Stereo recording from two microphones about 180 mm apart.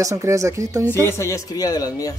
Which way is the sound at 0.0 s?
15° right (ahead or behind).